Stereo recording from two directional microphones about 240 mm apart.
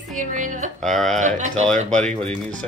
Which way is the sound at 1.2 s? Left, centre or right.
Right.